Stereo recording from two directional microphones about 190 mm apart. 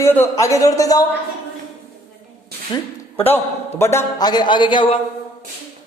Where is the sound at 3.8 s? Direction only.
15° left (ahead or behind).